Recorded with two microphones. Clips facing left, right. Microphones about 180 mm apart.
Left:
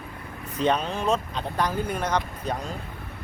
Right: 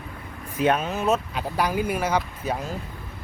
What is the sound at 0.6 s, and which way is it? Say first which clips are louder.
Speech: right 2 dB; 5° right (ahead or behind).